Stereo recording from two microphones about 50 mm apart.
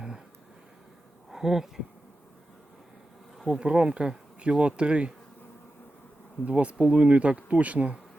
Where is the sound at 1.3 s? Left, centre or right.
Centre.